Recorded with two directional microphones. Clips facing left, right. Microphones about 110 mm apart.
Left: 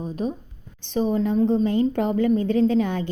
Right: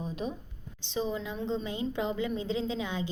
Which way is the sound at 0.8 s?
55° left (ahead or behind).